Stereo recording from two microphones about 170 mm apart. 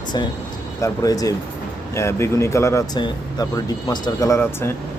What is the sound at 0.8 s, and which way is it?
Speech, 20° left (ahead or behind).